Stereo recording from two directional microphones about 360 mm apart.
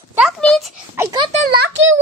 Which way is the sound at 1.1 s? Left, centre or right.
Right.